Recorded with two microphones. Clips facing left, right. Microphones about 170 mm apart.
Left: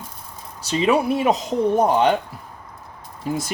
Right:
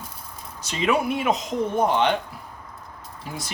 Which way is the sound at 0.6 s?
35° left (ahead or behind).